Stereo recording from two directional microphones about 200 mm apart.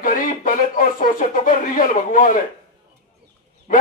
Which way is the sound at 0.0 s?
40° left (ahead or behind).